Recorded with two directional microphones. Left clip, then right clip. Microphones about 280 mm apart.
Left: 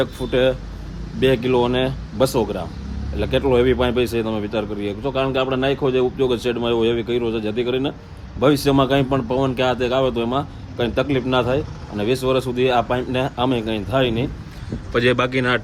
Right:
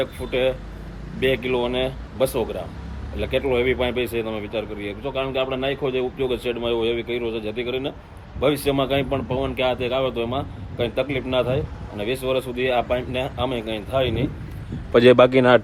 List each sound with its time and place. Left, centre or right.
0.0 s speech: centre
14.9 s a man's voice: centre